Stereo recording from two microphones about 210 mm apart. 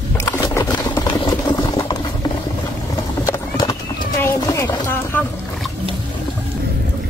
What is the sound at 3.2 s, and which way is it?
Horse, 15° left (ahead or behind).